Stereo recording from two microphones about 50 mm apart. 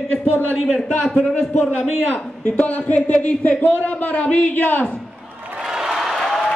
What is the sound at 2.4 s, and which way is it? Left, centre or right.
A man's voice, left.